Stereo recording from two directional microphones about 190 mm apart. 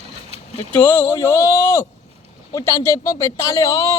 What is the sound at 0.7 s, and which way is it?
Speech, 10° left (ahead or behind).